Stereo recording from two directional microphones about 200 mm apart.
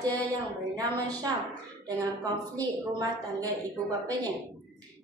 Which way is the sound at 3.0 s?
20° right (ahead or behind).